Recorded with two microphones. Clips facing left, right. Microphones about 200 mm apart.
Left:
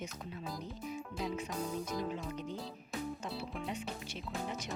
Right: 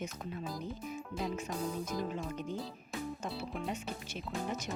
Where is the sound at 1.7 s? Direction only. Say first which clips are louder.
Right 1 dB; centre (ahead or behind).